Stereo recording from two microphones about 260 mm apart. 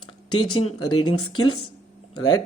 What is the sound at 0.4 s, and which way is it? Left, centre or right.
Speech, left.